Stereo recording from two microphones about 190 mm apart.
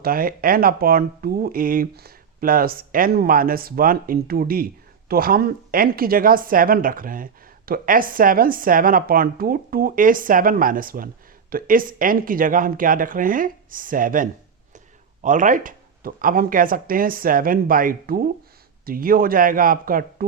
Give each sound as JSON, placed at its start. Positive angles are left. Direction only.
{"t": 0.0, "sound": "speech", "side_deg": -50}